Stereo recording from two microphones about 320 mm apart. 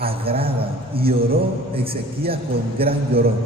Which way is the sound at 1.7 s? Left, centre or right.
Centre.